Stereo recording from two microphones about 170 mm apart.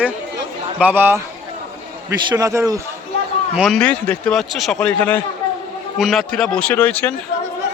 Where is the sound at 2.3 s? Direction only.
20° right (ahead or behind).